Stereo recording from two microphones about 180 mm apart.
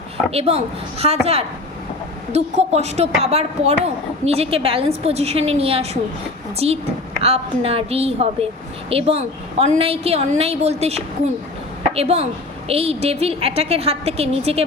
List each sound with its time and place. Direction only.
0.3 s a woman's voice: 35° right (ahead or behind)